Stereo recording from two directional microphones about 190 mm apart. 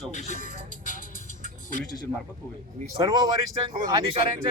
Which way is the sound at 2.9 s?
20° right (ahead or behind).